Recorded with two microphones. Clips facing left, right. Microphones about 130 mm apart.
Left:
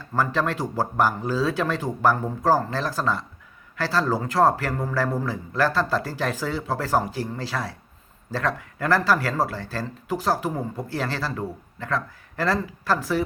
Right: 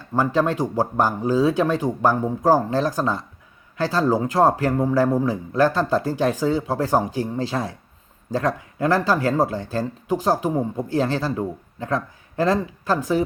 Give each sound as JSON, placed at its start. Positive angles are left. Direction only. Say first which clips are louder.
{"t": 0.1, "sound": "speech", "louder": "right 4 dB", "side_deg": -15}